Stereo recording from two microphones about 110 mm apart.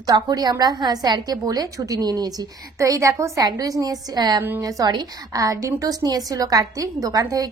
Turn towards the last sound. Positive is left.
turn(degrees=-35)  # may be behind; listen again after turning